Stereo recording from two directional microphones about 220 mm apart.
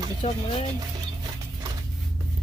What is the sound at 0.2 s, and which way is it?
Speech, 30° left (ahead or behind).